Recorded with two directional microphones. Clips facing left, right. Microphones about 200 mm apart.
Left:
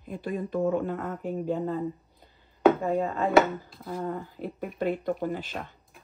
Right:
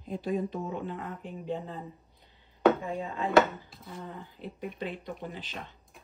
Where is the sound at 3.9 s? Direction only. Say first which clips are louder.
Left 10 dB; 50° left (ahead or behind).